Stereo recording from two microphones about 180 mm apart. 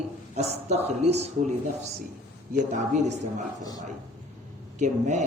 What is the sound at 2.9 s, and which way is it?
Speech, 40° right (ahead or behind).